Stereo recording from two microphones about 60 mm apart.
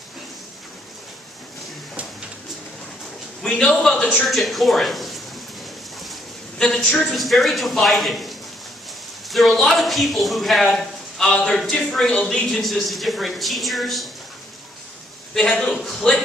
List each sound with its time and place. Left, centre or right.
4.0 s speech: left
4.3 s speech: centre
6.6 s a woman's voice: centre
7.2 s a man's voice: centre
12.4 s a man's voice: centre
15.3 s a woman's voice: centre